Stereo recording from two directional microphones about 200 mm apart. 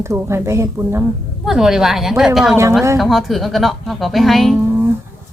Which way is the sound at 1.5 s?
Centre (ahead or behind).